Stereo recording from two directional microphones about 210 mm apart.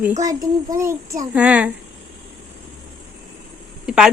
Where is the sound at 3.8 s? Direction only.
5° right (ahead or behind).